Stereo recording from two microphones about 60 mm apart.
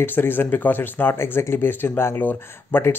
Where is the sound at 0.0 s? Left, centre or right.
Left.